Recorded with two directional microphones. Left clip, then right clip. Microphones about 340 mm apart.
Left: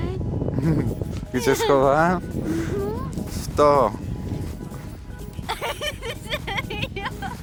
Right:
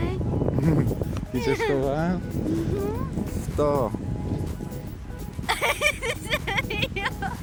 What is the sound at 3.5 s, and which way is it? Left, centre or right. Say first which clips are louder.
Speech: left 7 dB; centre.